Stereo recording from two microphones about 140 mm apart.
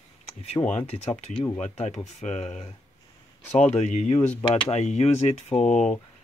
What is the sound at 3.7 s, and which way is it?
Speech, 55° left (ahead or behind).